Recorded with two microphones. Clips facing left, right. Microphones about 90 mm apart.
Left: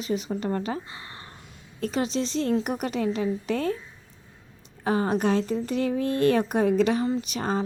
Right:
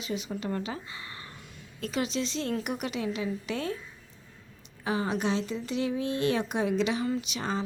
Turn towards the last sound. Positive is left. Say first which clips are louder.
# left 4 dB
turn(degrees=45)  # may be behind; listen again after turning